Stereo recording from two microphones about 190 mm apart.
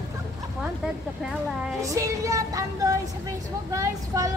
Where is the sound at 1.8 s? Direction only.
15° right (ahead or behind).